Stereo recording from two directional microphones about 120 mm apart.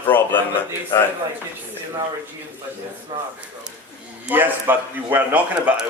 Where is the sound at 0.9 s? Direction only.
30° left (ahead or behind).